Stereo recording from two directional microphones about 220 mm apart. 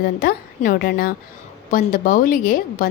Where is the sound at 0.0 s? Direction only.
40° left (ahead or behind).